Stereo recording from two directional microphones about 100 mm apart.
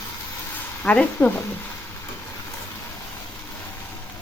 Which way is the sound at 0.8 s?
15° left (ahead or behind).